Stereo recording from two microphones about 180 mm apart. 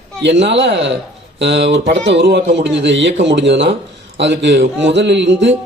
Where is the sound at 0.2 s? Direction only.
80° right.